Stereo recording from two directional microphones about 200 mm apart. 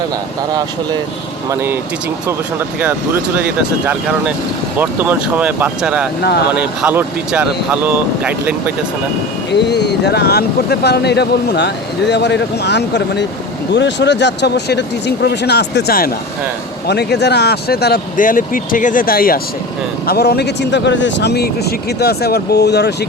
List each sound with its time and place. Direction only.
1.5 s speech: 10° right (ahead or behind)
3.3 s speech: 5° right (ahead or behind)
9.5 s speech: 55° left (ahead or behind)